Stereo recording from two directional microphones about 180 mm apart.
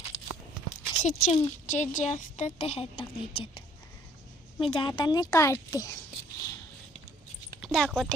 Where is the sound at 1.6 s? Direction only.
45° left (ahead or behind).